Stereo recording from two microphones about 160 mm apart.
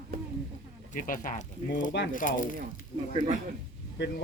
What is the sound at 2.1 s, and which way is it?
Speech, 55° left (ahead or behind).